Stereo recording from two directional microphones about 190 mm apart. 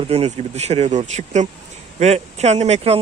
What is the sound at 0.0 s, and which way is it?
Speech, 30° right (ahead or behind).